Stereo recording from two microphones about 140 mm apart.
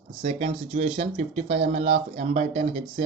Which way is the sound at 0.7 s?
50° right (ahead or behind).